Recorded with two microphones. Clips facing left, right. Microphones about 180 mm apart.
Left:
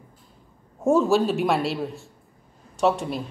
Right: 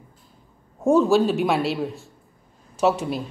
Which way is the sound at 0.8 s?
Centre (ahead or behind).